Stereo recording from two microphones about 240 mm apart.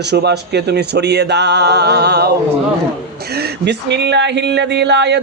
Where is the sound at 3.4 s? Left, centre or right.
Right.